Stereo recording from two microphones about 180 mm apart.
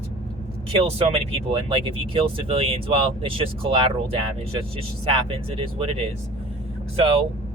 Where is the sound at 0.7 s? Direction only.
35° right (ahead or behind).